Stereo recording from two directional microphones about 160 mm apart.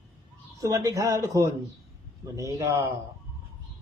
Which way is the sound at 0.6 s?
20° right (ahead or behind).